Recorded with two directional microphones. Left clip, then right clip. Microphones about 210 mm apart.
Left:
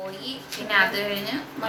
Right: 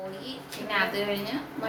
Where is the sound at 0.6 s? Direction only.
5° right (ahead or behind).